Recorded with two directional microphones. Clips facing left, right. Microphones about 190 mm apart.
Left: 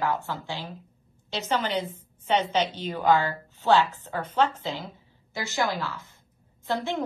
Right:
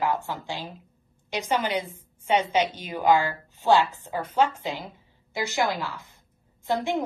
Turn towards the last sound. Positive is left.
turn(degrees=-15)  # may be behind; listen again after turning